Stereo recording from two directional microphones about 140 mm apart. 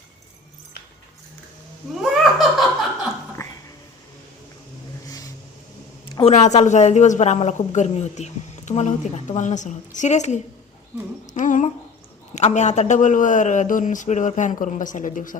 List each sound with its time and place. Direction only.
2.0 s laughter: centre (ahead or behind)
6.2 s a woman's voice: 55° left (ahead or behind)